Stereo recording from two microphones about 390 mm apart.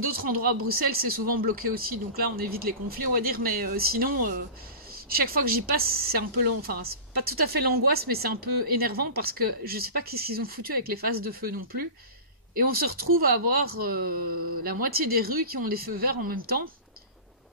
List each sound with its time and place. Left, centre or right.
0.0 s speech: right